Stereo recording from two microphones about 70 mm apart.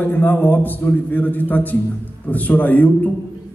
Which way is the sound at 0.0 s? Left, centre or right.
Left.